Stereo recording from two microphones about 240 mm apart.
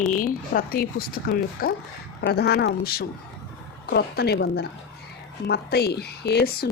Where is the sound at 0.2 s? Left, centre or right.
Left.